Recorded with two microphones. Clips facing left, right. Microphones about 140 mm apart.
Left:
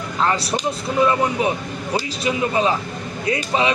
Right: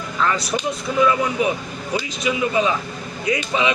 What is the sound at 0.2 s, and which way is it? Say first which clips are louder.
Speech: left 1 dB; 30° left (ahead or behind).